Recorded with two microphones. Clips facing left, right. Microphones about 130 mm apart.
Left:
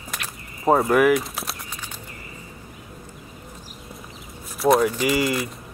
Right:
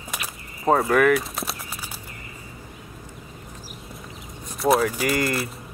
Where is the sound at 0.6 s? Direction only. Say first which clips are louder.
Left 1 dB; 5° left (ahead or behind).